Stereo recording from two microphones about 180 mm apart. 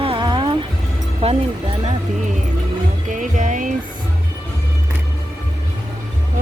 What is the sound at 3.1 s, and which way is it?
Music, 45° right (ahead or behind).